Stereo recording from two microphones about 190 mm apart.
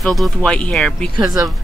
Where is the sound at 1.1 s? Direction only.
20° right (ahead or behind).